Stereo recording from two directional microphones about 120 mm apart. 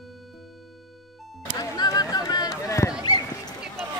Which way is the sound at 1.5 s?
30° left (ahead or behind).